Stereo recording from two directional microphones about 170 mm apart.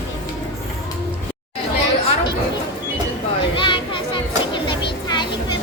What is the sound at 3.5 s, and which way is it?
Music, 30° left (ahead or behind).